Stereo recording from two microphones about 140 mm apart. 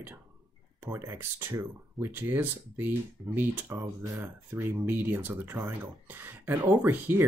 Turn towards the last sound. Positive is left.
turn(degrees=-15)  # may be behind; listen again after turning